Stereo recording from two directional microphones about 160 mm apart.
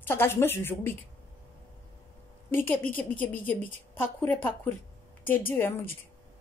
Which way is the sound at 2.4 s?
15° left (ahead or behind).